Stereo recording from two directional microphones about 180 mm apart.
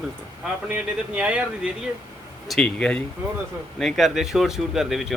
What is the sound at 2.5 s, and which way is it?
Speech, 5° left (ahead or behind).